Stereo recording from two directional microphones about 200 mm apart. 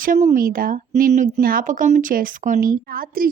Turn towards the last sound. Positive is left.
turn(degrees=-45)  # may be behind; listen again after turning